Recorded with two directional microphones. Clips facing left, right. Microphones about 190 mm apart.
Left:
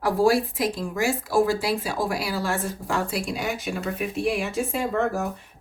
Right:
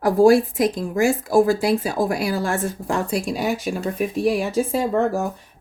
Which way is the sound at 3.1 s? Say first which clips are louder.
Right 5 dB; centre (ahead or behind).